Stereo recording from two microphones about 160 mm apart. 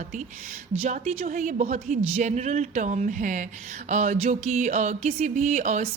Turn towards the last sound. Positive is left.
turn(degrees=-50)  # may be behind; listen again after turning